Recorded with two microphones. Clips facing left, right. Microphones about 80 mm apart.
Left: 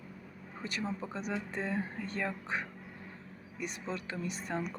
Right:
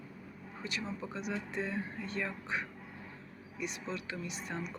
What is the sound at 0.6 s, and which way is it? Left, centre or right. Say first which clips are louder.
Speech: left 2 dB; left.